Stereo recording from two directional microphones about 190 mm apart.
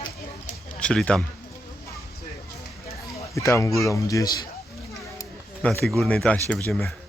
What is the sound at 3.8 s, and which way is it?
Speech, 15° left (ahead or behind).